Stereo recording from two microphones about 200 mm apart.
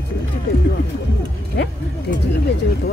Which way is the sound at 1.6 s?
60° left (ahead or behind).